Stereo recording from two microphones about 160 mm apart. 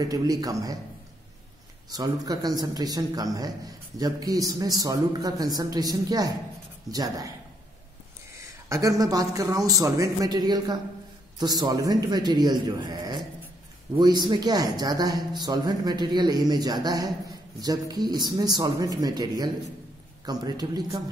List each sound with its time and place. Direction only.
0.0 s a man's voice: 25° right (ahead or behind)
1.9 s a man's voice: 25° right (ahead or behind)
8.6 s a man's voice: 20° right (ahead or behind)